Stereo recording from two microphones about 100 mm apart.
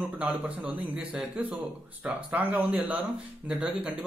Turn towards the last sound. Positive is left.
turn(degrees=-10)  # may be behind; listen again after turning